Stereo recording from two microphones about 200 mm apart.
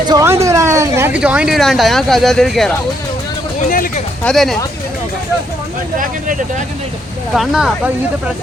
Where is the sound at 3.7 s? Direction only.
40° left (ahead or behind).